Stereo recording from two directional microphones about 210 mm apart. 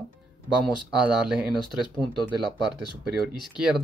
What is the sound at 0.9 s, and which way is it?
Speech, 5° right (ahead or behind).